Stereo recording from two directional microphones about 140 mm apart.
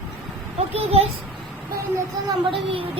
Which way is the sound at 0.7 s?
45° right (ahead or behind).